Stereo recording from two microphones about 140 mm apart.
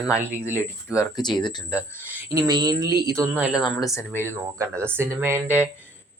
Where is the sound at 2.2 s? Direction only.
20° right (ahead or behind).